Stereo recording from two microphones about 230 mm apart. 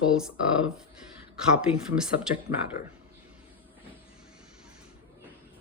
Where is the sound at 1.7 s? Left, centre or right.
Left.